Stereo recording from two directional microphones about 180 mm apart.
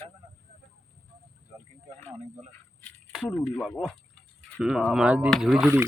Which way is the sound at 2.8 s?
5° left (ahead or behind).